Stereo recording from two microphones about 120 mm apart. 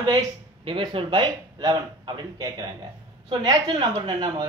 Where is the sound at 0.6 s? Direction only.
45° right (ahead or behind).